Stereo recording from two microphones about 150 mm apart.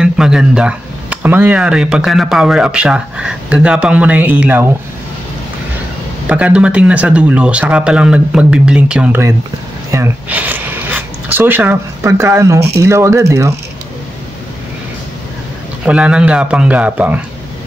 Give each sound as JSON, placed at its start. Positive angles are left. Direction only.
{"t": 0.0, "sound": "speech", "side_deg": -5}
{"t": 6.2, "sound": "speech", "side_deg": -10}
{"t": 15.8, "sound": "speech", "side_deg": -5}